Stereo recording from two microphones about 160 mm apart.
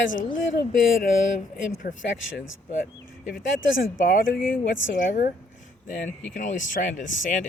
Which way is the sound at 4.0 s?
60° left (ahead or behind).